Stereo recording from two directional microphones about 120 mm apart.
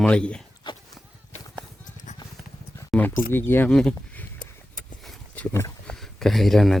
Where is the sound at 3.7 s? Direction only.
5° left (ahead or behind).